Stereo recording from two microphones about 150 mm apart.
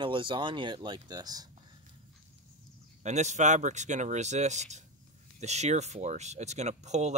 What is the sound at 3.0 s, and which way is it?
Speech, 50° right (ahead or behind).